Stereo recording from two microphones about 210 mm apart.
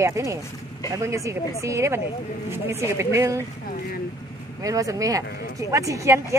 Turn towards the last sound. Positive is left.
turn(degrees=-15)  # may be behind; listen again after turning